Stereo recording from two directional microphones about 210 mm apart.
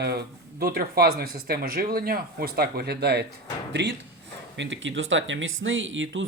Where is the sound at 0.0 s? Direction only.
50° right (ahead or behind).